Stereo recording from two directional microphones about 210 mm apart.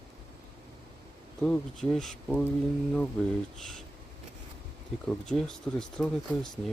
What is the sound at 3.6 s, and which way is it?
Speech, centre (ahead or behind).